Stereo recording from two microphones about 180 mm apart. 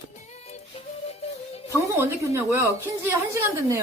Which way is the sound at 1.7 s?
15° right (ahead or behind).